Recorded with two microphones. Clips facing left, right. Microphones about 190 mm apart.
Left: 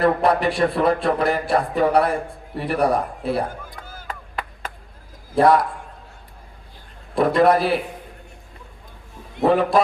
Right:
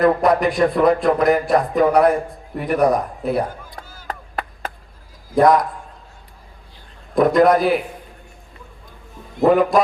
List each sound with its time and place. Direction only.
0.0 s speech: 30° left (ahead or behind)
4.0 s chop: 45° right (ahead or behind)
5.4 s speech: 30° left (ahead or behind)
7.2 s speech: 30° left (ahead or behind)
9.6 s a sound: 30° left (ahead or behind)